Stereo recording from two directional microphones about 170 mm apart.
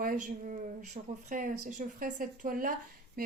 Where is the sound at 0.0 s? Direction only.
50° right (ahead or behind).